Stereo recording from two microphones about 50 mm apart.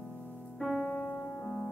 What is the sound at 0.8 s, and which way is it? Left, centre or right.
Music, left.